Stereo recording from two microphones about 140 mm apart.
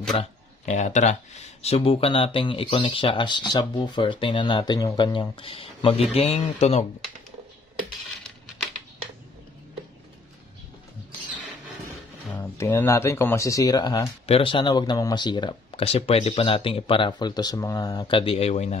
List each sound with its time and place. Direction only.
0.1 s speech: 45° left (ahead or behind)
0.7 s speech: 60° left (ahead or behind)
12.3 s speech: 15° left (ahead or behind)
14.2 s speech: 40° left (ahead or behind)